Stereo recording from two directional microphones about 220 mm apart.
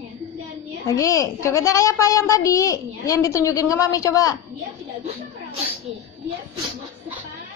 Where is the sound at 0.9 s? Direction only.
15° left (ahead or behind).